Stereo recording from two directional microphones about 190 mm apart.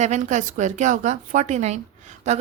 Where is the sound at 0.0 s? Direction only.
40° right (ahead or behind).